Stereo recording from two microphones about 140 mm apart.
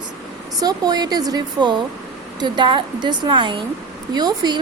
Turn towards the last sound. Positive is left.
turn(degrees=-30)  # may be behind; listen again after turning